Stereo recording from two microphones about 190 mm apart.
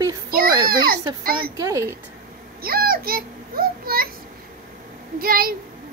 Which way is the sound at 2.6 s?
50° right (ahead or behind).